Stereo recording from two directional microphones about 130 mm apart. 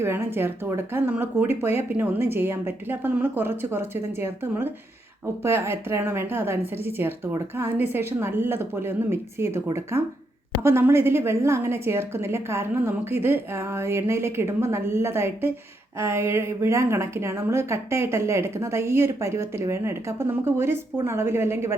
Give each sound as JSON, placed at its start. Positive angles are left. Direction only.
{"t": 0.0, "sound": "a woman's voice", "side_deg": -20}